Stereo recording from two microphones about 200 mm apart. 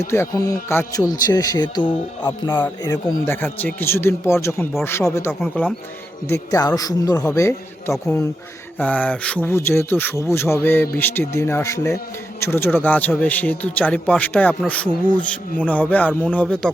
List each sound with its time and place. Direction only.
0.0 s a man's voice: 15° left (ahead or behind)